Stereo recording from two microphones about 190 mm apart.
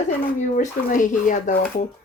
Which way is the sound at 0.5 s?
45° left (ahead or behind).